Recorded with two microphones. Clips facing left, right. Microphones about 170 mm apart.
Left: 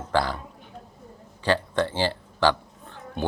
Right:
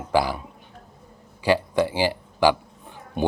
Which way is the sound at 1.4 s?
10° right (ahead or behind).